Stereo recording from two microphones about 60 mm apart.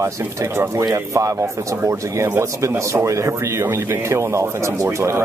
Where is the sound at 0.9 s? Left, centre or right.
Right.